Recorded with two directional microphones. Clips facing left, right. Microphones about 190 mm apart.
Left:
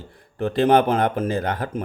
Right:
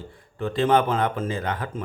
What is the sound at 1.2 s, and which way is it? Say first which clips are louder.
Speech: left 4 dB; 40° left (ahead or behind).